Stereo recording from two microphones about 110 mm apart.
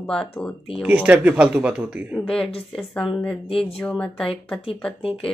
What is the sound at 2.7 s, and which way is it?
Speech, 5° left (ahead or behind).